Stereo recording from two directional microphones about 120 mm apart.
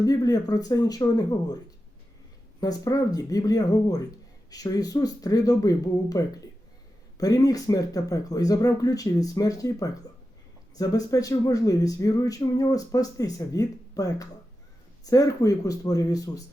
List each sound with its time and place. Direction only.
0.0 s speech: 30° left (ahead or behind)
2.6 s speech: 30° left (ahead or behind)